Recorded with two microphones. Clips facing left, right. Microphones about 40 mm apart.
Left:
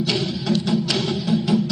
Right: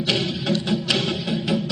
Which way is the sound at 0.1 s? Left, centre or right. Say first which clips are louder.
Right 3 dB; right.